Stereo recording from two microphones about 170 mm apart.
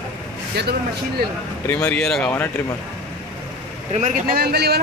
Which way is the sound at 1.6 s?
10° left (ahead or behind).